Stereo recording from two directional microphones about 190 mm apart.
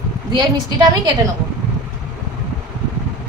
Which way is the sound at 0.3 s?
20° right (ahead or behind).